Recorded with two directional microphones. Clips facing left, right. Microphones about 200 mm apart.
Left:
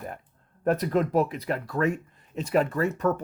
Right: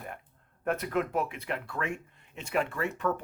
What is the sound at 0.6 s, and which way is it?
Speech, 35° left (ahead or behind).